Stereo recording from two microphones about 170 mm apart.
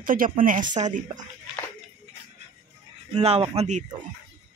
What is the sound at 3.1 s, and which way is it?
Speech, 35° right (ahead or behind).